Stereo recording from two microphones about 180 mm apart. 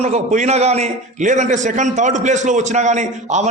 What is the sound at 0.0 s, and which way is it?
A man's voice, 40° right (ahead or behind).